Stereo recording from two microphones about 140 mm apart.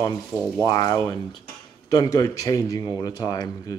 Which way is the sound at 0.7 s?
25° left (ahead or behind).